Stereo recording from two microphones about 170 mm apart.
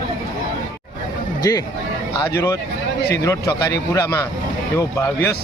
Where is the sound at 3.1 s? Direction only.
20° left (ahead or behind).